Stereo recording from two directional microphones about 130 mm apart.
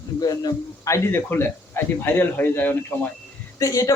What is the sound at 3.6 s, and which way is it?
Speech, 25° left (ahead or behind).